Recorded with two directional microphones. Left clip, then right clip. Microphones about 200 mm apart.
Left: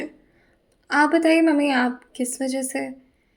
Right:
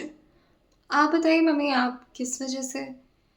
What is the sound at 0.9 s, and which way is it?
A woman's voice, 20° left (ahead or behind).